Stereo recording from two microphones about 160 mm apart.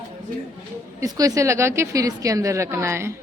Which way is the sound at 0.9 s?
20° right (ahead or behind).